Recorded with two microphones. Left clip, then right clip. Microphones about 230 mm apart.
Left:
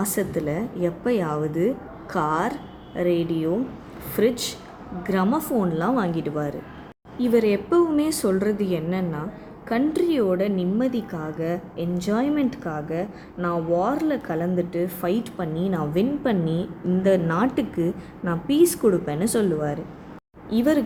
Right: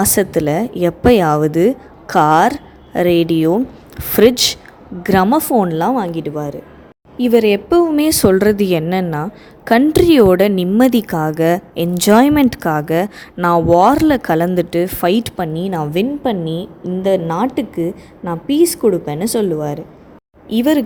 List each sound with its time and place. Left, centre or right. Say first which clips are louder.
0.0 s a woman's voice: right 11 dB; right
6.1 s a woman's voice: right 5 dB; right
7.2 s a woman's voice: right 8 dB; right
16.2 s a woman's voice: right 6 dB; right